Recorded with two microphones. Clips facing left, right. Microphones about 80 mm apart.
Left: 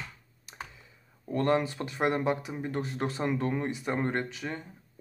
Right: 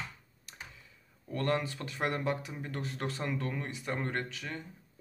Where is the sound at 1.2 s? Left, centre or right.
Left.